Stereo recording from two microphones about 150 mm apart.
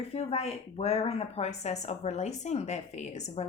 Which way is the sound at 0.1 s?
45° left (ahead or behind).